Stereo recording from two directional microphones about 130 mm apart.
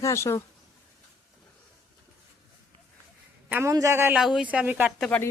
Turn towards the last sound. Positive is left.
turn(degrees=10)  # may be behind; listen again after turning